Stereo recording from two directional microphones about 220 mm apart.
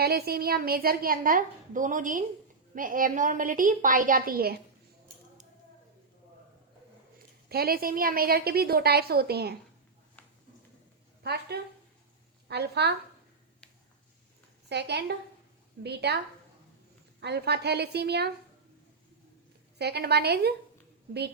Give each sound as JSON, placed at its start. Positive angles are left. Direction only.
{"t": 0.0, "sound": "a woman's voice", "side_deg": -45}
{"t": 7.5, "sound": "a woman's voice", "side_deg": -45}
{"t": 10.2, "sound": "a sound", "side_deg": 10}
{"t": 11.2, "sound": "a woman's voice", "side_deg": -45}
{"t": 14.7, "sound": "a woman's voice", "side_deg": -50}
{"t": 17.2, "sound": "a woman's voice", "side_deg": -50}
{"t": 19.8, "sound": "a woman's voice", "side_deg": -50}